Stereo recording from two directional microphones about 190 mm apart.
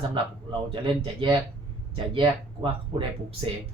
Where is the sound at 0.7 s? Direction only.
25° right (ahead or behind).